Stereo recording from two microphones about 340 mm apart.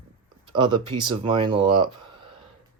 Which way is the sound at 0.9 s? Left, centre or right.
Centre.